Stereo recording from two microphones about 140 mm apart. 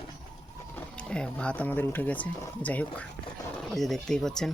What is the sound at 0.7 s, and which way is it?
Speech, 10° left (ahead or behind).